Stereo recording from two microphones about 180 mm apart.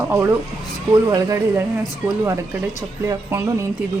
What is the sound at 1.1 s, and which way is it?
Speech, 15° right (ahead or behind).